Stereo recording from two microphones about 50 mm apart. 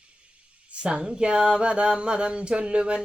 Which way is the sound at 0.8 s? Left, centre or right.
Centre.